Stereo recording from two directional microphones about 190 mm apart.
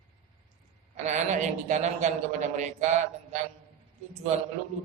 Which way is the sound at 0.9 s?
40° right (ahead or behind).